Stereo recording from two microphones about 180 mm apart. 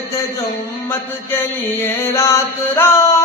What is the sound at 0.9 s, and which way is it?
Music, 10° left (ahead or behind).